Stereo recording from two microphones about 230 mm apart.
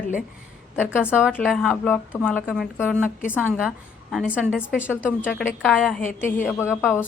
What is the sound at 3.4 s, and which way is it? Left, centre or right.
A woman's voice, centre.